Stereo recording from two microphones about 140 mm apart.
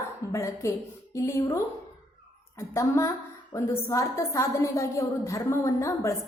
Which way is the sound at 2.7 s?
20° left (ahead or behind).